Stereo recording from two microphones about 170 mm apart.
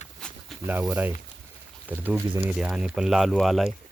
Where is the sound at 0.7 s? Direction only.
10° right (ahead or behind).